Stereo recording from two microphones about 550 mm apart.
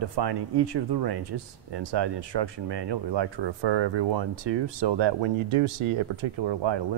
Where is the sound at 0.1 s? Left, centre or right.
Right.